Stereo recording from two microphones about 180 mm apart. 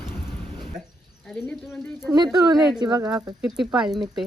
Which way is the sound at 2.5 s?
Centre (ahead or behind).